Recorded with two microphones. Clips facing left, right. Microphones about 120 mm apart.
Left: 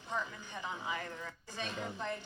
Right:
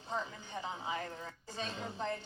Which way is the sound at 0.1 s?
30° right (ahead or behind).